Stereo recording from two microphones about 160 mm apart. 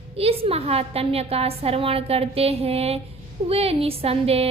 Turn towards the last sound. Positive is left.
turn(degrees=-40)  # may be behind; listen again after turning